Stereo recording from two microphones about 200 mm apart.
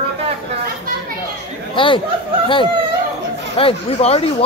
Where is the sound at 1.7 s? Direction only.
25° left (ahead or behind).